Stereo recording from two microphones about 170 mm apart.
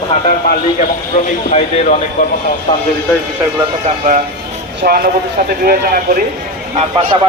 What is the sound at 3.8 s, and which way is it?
Speech, 50° right (ahead or behind).